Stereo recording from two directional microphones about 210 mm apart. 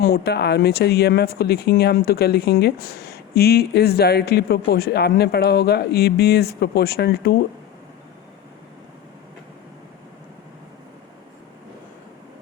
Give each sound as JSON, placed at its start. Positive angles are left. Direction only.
{"t": 0.0, "sound": "speech", "side_deg": 50}